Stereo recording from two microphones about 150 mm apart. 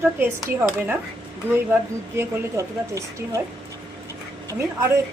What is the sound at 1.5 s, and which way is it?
A woman's voice, 15° right (ahead or behind).